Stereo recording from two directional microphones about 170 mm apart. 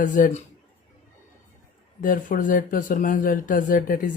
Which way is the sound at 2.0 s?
50° left (ahead or behind).